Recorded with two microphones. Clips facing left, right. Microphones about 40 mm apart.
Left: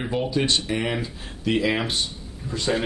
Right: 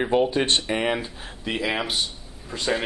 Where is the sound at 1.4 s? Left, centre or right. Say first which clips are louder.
Left 3 dB; centre.